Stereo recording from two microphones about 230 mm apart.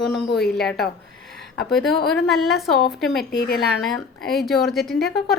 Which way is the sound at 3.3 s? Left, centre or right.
Left.